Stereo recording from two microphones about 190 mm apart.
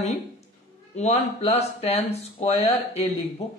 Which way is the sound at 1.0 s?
35° left (ahead or behind).